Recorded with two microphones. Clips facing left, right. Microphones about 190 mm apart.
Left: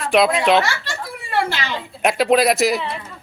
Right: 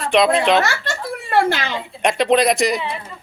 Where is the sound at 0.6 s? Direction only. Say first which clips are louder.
Right 3 dB; 50° right (ahead or behind).